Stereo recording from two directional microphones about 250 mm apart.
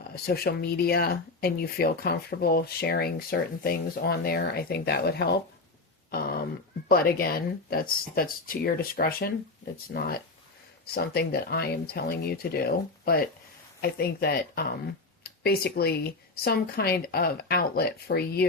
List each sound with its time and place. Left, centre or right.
0.3 s speech: left
6.1 s a sound: left
6.8 s speech: left